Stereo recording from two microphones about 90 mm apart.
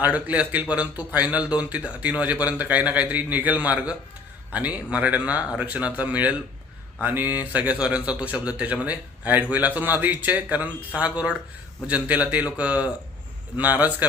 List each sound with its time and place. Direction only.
0.0 s a man's voice: 15° right (ahead or behind)